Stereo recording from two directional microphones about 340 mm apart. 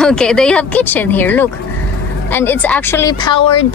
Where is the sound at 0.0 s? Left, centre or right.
Centre.